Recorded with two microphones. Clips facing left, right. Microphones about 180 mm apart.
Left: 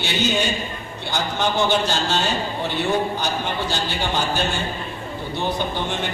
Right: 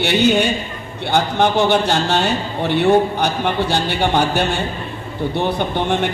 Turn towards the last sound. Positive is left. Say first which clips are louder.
# right 6 dB
turn(degrees=-60)  # may be behind; listen again after turning